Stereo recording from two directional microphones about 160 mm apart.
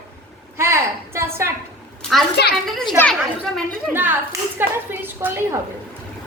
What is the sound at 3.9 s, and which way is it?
A woman's voice, 10° right (ahead or behind).